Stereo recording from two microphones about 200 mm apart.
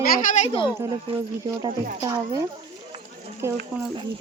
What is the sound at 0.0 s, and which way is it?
Speech, 45° left (ahead or behind).